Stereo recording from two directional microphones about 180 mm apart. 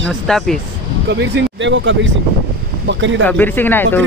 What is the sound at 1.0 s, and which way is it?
Speech, 80° right.